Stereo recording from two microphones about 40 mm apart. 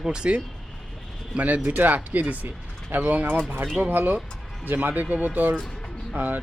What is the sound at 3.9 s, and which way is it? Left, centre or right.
Speech, right.